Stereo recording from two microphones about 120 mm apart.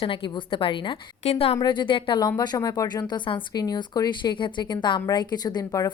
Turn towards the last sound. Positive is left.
turn(degrees=30)  # may be behind; listen again after turning